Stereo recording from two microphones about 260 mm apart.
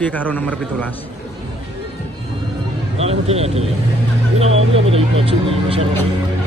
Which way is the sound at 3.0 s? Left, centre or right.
Right.